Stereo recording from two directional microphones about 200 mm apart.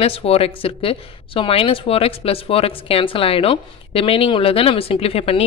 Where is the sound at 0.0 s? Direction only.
30° left (ahead or behind).